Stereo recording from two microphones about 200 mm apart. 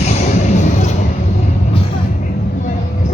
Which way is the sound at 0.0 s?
35° left (ahead or behind).